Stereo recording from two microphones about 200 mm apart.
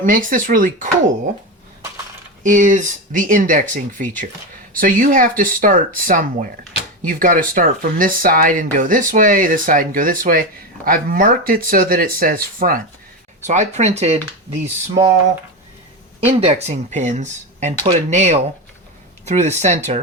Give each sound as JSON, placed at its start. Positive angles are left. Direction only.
{"t": 0.0, "sound": "speech", "side_deg": -45}
{"t": 2.4, "sound": "speech", "side_deg": -40}
{"t": 16.4, "sound": "speech", "side_deg": -35}